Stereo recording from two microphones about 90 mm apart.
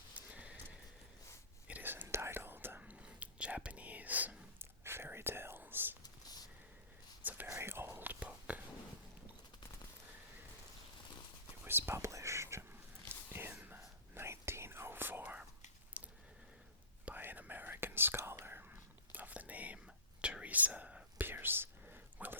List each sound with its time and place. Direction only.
0.2 s horse: 15° right (ahead or behind)
1.6 s whispering: 20° right (ahead or behind)
7.2 s whispering: 20° right (ahead or behind)
11.6 s whispering: 25° right (ahead or behind)
13.5 s whispering: 20° right (ahead or behind)
16.0 s a sound: 15° right (ahead or behind)
17.1 s whispering: 20° right (ahead or behind)